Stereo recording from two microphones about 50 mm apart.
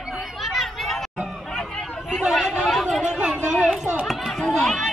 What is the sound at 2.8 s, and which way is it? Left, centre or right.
Speech, centre.